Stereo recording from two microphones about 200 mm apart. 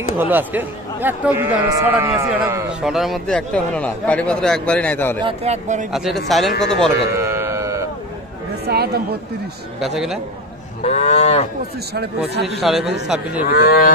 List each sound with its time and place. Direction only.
0.2 s speech: 10° right (ahead or behind); by 5.2 s 10° left (ahead or behind)
5.2 s speech: 30° right (ahead or behind)
5.9 s speech: centre (ahead or behind)
7.2 s music: 10° right (ahead or behind)
8.6 s speech: 55° right (ahead or behind)
9.8 s speech: centre (ahead or behind)
10.8 s cattle: 35° left (ahead or behind)
13.1 s cattle: 5° right (ahead or behind)
13.5 s speech: 50° left (ahead or behind)